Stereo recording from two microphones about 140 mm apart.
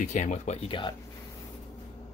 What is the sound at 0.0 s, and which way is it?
Speech, 60° left (ahead or behind).